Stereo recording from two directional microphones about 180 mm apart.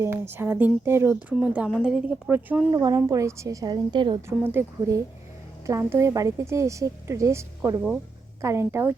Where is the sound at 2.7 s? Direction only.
20° right (ahead or behind).